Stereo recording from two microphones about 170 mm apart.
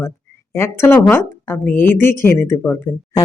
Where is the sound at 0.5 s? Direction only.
15° left (ahead or behind).